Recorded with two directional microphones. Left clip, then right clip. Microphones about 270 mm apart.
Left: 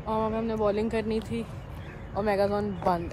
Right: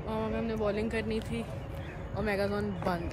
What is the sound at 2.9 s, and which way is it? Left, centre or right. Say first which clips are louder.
Speech: left 8 dB; centre.